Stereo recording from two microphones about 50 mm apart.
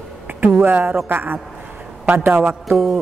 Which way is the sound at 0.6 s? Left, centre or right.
Right.